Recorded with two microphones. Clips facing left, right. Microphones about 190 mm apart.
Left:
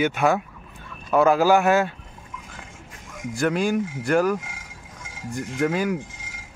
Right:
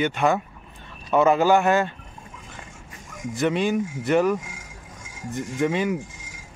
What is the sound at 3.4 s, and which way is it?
Speech, centre (ahead or behind).